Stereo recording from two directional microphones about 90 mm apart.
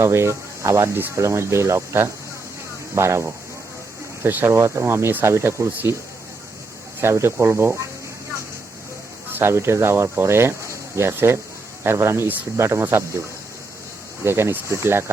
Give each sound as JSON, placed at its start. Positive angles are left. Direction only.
{"t": 0.0, "sound": "speech", "side_deg": -30}
{"t": 7.0, "sound": "speech", "side_deg": -30}
{"t": 9.3, "sound": "speech", "side_deg": -30}
{"t": 14.3, "sound": "speech", "side_deg": -30}